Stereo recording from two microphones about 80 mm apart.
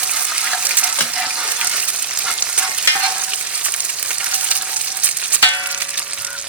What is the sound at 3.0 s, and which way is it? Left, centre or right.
Frying, centre.